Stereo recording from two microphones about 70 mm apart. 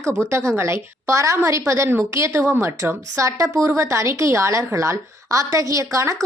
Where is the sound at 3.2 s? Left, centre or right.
Right.